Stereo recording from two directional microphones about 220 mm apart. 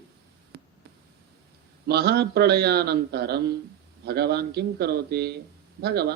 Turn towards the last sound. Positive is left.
turn(degrees=-45)  # may be behind; listen again after turning